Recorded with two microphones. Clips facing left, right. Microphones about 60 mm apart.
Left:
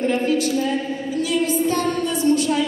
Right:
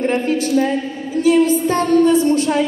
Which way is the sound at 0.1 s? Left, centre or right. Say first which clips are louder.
Right 3 dB; right.